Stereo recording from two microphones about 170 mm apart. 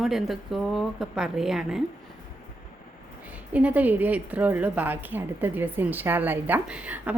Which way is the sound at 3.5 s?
10° right (ahead or behind).